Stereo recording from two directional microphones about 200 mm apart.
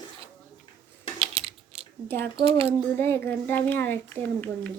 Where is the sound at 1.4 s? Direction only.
30° right (ahead or behind).